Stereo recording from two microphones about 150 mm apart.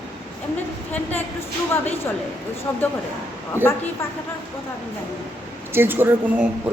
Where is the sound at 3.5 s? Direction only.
15° left (ahead or behind).